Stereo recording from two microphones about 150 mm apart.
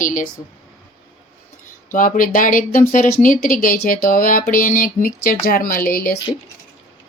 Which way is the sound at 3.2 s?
65° left (ahead or behind).